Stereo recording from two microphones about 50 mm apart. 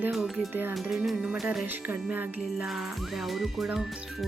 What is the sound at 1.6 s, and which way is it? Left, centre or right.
Music, right.